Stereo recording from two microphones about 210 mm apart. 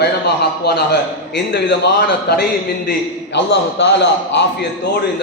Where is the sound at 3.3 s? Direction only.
55° left (ahead or behind).